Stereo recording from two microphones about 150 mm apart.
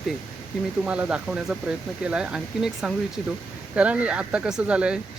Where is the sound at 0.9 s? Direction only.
10° right (ahead or behind).